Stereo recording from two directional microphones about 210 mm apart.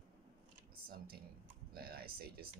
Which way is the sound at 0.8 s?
45° right (ahead or behind).